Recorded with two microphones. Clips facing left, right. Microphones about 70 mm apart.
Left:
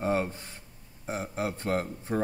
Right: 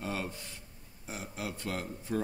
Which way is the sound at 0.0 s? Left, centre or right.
Left.